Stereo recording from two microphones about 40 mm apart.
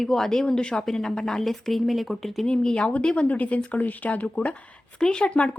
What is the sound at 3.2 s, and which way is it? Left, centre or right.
Speech, left.